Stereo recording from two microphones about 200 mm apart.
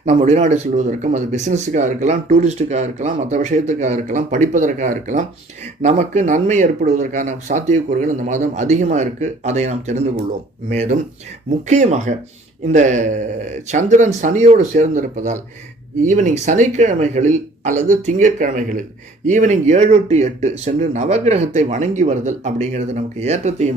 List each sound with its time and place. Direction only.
0.0 s speech: 35° right (ahead or behind)